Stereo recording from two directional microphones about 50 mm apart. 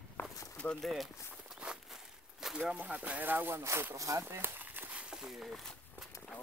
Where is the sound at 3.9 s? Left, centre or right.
Right.